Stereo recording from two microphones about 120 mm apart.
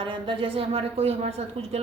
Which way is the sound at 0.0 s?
45° right (ahead or behind).